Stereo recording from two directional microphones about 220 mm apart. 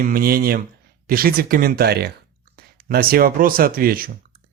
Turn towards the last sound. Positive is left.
turn(degrees=-40)  # may be behind; listen again after turning